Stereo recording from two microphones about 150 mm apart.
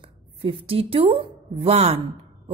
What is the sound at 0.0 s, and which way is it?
A woman's voice, 35° right (ahead or behind).